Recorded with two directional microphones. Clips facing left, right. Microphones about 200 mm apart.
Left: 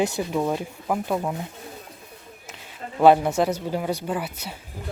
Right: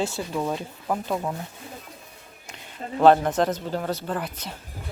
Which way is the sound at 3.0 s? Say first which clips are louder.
Left 1 dB; 10° left (ahead or behind).